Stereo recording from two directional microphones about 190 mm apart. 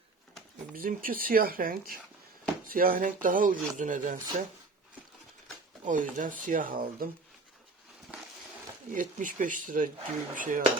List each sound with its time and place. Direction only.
0.8 s speech: 50° right (ahead or behind)
5.8 s speech: 45° right (ahead or behind)
9.0 s speech: 45° right (ahead or behind)